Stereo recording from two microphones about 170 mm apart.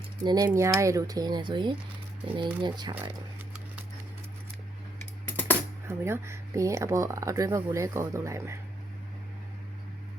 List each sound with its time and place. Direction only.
0.3 s speech: 20° right (ahead or behind)
5.9 s speech: 15° right (ahead or behind)